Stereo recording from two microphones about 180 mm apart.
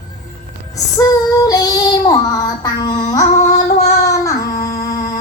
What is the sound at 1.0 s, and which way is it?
Child singing, 20° left (ahead or behind).